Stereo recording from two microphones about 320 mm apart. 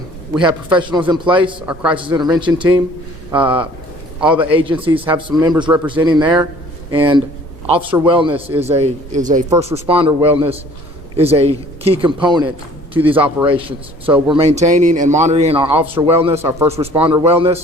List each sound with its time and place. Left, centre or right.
0.3 s a man's voice: centre
1.6 s a man's voice: centre; by 9.4 s right
9.5 s a man's voice: centre
13.5 s a man's voice: centre
16.6 s a man's voice: centre